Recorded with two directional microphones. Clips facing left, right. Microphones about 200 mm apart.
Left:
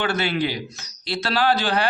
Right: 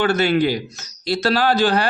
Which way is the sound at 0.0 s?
45° right (ahead or behind).